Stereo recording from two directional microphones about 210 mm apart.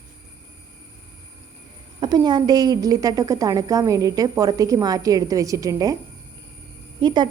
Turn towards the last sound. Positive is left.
turn(degrees=-20)  # may be behind; listen again after turning